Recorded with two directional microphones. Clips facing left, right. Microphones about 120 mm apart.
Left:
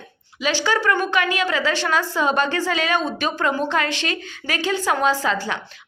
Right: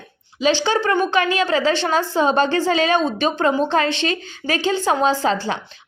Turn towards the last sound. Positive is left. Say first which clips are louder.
# right 2 dB
turn(degrees=-30)  # may be behind; listen again after turning